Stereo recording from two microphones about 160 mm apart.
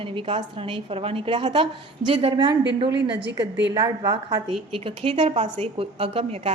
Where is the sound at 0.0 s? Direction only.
35° right (ahead or behind).